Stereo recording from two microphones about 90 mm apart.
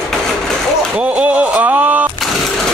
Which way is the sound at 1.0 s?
15° right (ahead or behind).